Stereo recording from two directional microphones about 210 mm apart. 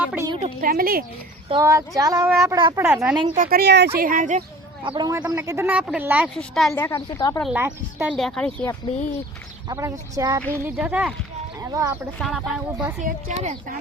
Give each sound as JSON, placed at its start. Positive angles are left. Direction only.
{"t": 0.0, "sound": "a woman's voice", "side_deg": -5}
{"t": 0.3, "sound": "a man's voice", "side_deg": -30}
{"t": 0.6, "sound": "speech", "side_deg": -45}
{"t": 1.5, "sound": "speech", "side_deg": -15}
{"t": 2.8, "sound": "speech", "side_deg": -5}
{"t": 3.3, "sound": "a woman's voice", "side_deg": -45}
{"t": 4.8, "sound": "a man's voice", "side_deg": -20}
{"t": 6.8, "sound": "a woman's voice", "side_deg": 15}
{"t": 7.4, "sound": "speech", "side_deg": -10}
{"t": 8.1, "sound": "speech", "side_deg": 0}
{"t": 9.6, "sound": "speech", "side_deg": -15}
{"t": 11.6, "sound": "speech", "side_deg": -15}
{"t": 12.2, "sound": "speech", "side_deg": 0}
{"t": 13.0, "sound": "a woman's voice", "side_deg": -40}